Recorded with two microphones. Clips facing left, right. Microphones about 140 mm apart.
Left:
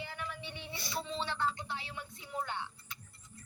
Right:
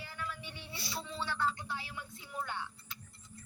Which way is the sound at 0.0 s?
20° left (ahead or behind).